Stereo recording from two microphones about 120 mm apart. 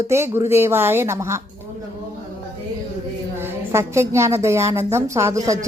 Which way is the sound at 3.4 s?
20° right (ahead or behind).